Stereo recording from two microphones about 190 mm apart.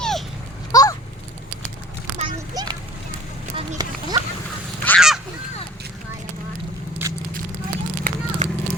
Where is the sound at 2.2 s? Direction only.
25° right (ahead or behind).